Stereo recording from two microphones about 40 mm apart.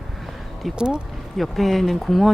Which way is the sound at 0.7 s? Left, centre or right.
Right.